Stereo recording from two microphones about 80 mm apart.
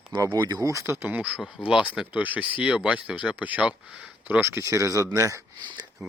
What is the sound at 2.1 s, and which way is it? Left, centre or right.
Speech, centre.